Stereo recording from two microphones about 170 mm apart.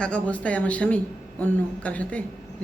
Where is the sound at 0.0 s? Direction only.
5° left (ahead or behind).